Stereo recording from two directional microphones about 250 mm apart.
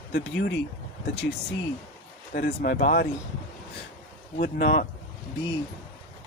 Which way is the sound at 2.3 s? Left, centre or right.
Left.